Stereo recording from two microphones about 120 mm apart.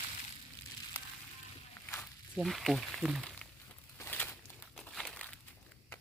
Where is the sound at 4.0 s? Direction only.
15° left (ahead or behind).